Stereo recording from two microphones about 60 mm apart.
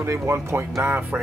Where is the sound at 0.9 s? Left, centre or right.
Right.